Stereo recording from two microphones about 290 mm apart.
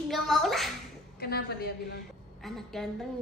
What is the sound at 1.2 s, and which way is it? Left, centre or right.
Speech, left.